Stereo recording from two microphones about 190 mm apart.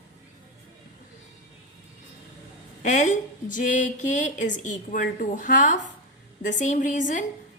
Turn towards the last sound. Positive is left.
turn(degrees=40)  # may be behind; listen again after turning